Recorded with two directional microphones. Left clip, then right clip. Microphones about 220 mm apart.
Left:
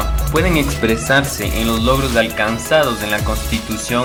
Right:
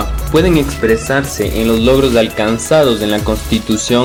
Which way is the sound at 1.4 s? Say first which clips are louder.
Right 5 dB; 15° right (ahead or behind).